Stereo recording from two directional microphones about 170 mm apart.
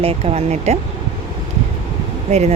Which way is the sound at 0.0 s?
35° right (ahead or behind).